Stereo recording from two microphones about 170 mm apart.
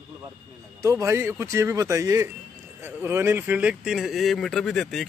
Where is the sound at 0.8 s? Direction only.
15° right (ahead or behind); by 5.0 s centre (ahead or behind).